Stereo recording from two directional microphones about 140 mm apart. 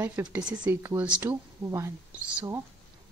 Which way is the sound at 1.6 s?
20° right (ahead or behind).